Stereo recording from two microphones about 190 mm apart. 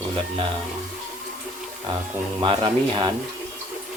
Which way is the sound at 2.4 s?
25° right (ahead or behind).